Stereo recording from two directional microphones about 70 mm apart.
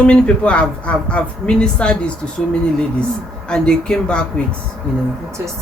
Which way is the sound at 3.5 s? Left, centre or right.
Centre.